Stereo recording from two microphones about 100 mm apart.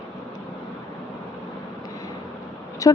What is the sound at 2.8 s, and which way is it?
Speech, 35° left (ahead or behind).